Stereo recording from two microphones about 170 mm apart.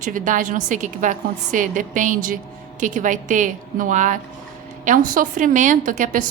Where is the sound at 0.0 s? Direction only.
50° right (ahead or behind).